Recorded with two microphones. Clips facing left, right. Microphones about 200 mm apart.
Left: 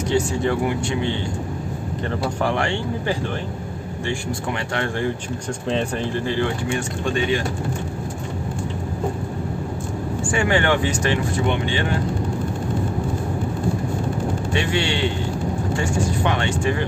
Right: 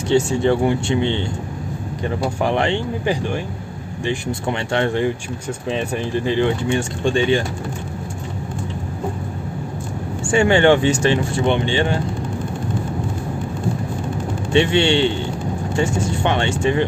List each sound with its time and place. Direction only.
0.1 s speech: 25° right (ahead or behind)
5.7 s speech: 5° right (ahead or behind)
6.1 s speech: 20° right (ahead or behind)
10.3 s speech: 25° right (ahead or behind)
14.5 s speech: 25° right (ahead or behind)